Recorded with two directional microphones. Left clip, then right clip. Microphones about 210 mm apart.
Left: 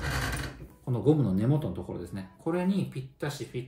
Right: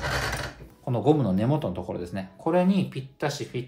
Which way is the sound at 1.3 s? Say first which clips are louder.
Right 4 dB; 25° right (ahead or behind).